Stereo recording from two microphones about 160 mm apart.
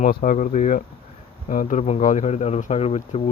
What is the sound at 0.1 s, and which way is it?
Speech, 60° left (ahead or behind).